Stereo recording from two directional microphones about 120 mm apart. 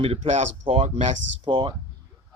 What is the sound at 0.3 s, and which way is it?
Speech, 75° right (ahead or behind).